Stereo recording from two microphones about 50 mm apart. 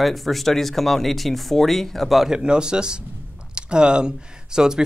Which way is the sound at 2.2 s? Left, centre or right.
Centre.